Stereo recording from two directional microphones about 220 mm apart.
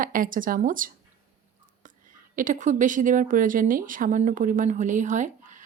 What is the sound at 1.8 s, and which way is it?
Whispering, 35° right (ahead or behind).